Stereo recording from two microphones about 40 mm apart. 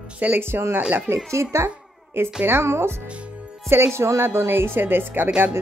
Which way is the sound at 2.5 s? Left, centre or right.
Right.